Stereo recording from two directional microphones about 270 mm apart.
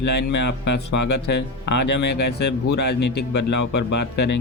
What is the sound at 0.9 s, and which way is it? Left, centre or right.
Speech, left.